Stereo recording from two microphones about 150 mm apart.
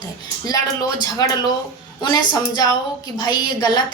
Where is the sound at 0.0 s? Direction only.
25° left (ahead or behind).